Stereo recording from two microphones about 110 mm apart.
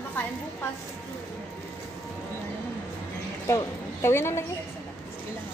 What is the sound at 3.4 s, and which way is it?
A woman's voice, 25° left (ahead or behind).